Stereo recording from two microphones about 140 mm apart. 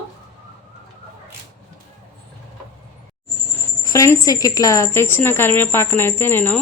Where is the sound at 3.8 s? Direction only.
25° left (ahead or behind).